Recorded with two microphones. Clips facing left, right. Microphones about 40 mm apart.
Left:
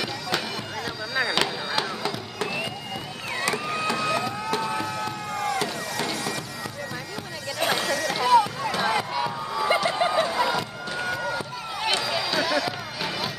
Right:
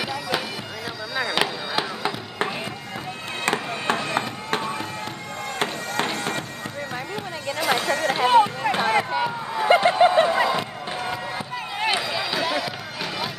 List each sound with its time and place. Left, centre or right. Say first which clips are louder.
1.1 s chop: right 1 dB; centre
2.0 s a sound: right 3 dB; right
3.4 s music: right 3 dB; right
7.7 s run: right 6 dB; right; by 12.7 s centre